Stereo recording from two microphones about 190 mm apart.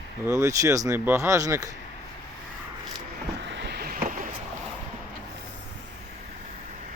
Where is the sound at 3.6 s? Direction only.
60° right (ahead or behind).